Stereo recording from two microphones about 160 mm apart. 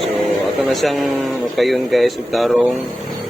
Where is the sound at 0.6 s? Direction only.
Centre (ahead or behind).